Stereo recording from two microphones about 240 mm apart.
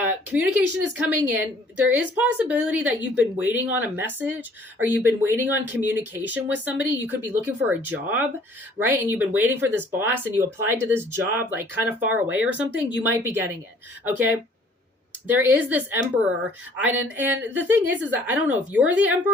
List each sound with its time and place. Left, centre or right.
0.0 s speech: centre